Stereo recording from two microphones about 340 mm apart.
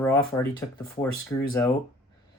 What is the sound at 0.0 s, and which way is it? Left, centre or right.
Speech, centre.